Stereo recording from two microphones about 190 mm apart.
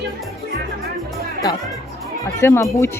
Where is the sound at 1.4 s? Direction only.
20° left (ahead or behind).